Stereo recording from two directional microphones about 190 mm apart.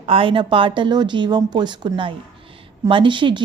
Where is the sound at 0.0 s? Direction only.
30° right (ahead or behind).